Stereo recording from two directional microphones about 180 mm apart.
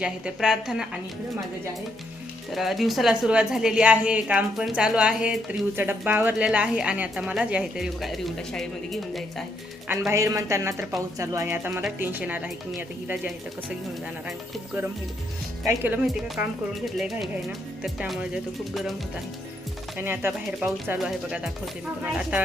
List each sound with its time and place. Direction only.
0.0 s a woman's voice: 5° right (ahead or behind)
2.5 s a woman's voice: centre (ahead or behind)
10.1 s speech: 15° right (ahead or behind)
15.6 s speech: 10° right (ahead or behind)
16.0 s a woman's voice: centre (ahead or behind)
20.0 s a woman's voice: 10° right (ahead or behind)